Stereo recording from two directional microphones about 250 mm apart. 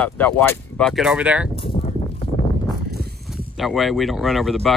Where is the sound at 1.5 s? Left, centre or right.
Left.